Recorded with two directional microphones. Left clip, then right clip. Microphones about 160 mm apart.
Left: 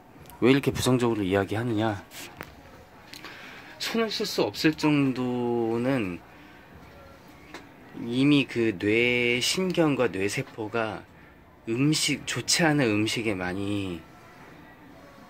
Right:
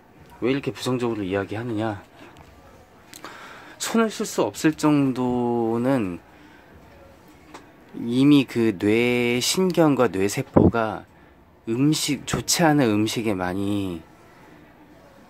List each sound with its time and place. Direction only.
0.4 s speech: 20° left (ahead or behind); by 2.0 s centre (ahead or behind)
3.1 s speech: 30° right (ahead or behind)
8.1 s speech: 30° right (ahead or behind)